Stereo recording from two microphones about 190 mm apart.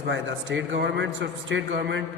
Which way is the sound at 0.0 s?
70° right (ahead or behind).